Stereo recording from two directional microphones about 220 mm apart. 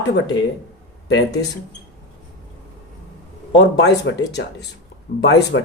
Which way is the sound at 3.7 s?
50° left (ahead or behind).